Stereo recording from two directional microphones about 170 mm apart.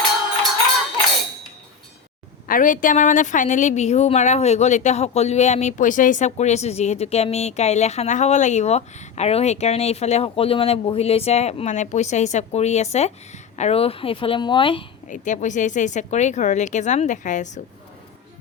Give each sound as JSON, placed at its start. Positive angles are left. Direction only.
{"t": 2.5, "sound": "a woman's voice", "side_deg": 50}
{"t": 15.0, "sound": "speech", "side_deg": 45}